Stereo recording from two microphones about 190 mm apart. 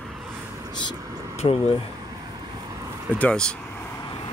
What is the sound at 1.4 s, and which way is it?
Speech, 30° left (ahead or behind).